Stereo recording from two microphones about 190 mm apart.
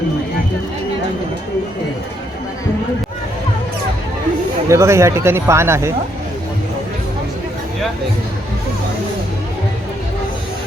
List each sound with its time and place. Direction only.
4.7 s speech: 15° right (ahead or behind)